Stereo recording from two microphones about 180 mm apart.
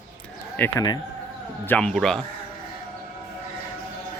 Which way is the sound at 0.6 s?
20° left (ahead or behind).